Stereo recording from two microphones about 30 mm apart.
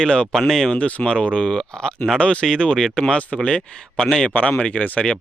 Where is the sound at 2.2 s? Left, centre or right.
Left.